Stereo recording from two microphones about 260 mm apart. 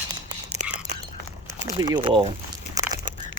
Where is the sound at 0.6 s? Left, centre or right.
Right.